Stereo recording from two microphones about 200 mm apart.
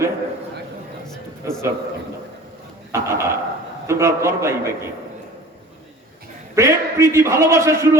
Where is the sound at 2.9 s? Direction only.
15° right (ahead or behind).